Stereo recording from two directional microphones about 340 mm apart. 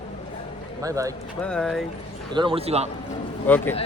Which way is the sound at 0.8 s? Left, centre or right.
Centre.